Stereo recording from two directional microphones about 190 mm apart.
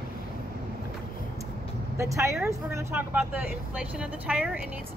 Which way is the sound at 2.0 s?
15° right (ahead or behind).